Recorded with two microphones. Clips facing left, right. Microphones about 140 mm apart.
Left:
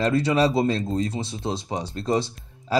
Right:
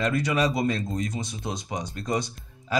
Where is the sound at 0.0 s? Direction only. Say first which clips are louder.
Left 4 dB; 30° left (ahead or behind).